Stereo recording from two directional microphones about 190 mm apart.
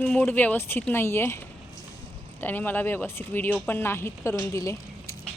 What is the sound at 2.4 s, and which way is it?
Speech, 10° left (ahead or behind).